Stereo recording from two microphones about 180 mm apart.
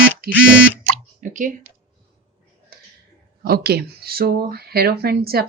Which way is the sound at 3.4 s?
60° right (ahead or behind).